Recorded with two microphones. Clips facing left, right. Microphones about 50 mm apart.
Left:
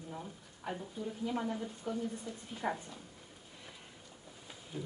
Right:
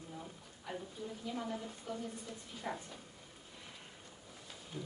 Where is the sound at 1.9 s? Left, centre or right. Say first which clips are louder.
Left 5 dB; left.